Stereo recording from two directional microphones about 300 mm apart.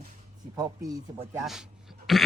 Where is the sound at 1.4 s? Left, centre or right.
Centre.